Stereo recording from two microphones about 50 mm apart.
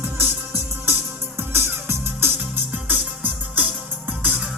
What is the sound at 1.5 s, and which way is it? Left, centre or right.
Music, right.